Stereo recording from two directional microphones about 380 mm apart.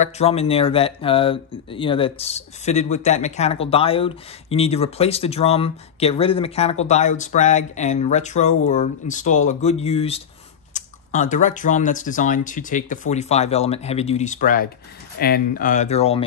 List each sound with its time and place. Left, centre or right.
0.0 s speech: centre